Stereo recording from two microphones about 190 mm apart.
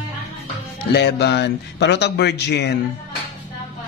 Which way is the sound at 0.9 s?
60° left (ahead or behind).